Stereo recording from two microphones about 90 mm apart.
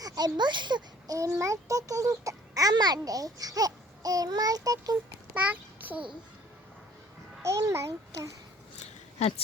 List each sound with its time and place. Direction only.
0.3 s a child's voice: 55° right (ahead or behind)
5.3 s a sound: 15° right (ahead or behind)
7.4 s a child's voice: 30° right (ahead or behind)